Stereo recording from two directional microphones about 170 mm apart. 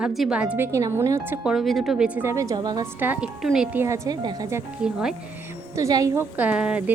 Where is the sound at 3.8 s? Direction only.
15° right (ahead or behind).